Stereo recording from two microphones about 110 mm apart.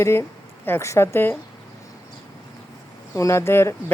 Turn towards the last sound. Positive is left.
turn(degrees=20)  # may be behind; listen again after turning